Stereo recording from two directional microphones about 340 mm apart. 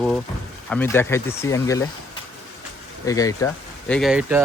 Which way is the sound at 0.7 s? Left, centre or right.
Centre.